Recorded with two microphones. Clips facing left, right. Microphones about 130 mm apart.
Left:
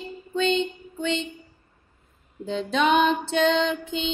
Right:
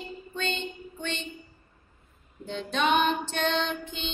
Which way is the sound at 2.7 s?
90° left.